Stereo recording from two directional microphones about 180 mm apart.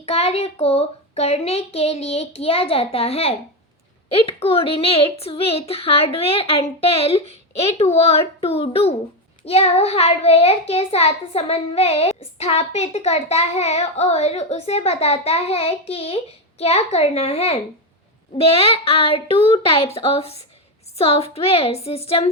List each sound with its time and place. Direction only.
0.0 s a child's voice: 35° left (ahead or behind)